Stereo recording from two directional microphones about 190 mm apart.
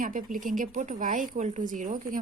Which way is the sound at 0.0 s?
45° right (ahead or behind).